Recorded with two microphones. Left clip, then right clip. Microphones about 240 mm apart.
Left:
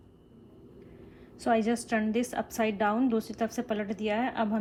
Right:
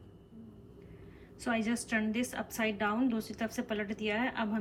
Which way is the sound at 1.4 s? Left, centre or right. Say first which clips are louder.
Left 7 dB; centre.